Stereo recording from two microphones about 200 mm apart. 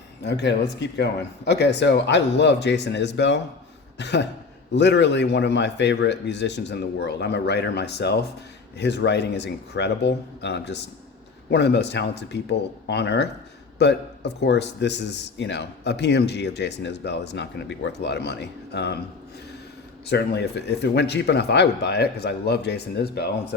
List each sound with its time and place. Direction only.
0.3 s speech: 60° left (ahead or behind)
20.1 s speech: 55° left (ahead or behind)